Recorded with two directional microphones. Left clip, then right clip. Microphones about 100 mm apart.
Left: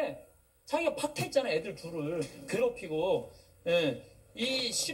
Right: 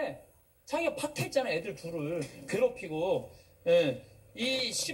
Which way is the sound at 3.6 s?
25° right (ahead or behind).